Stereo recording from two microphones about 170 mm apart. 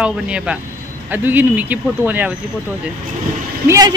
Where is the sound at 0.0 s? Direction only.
5° right (ahead or behind).